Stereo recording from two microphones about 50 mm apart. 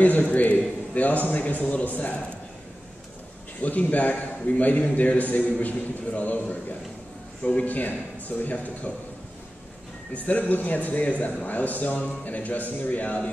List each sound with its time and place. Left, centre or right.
0.0 s a man's voice: left
3.6 s a man's voice: left
10.1 s a man's voice: left